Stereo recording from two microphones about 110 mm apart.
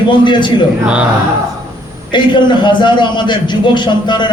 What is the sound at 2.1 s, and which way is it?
A man's voice, 45° left (ahead or behind).